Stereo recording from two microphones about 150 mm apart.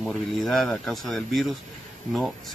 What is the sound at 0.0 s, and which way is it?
Speech, 5° left (ahead or behind).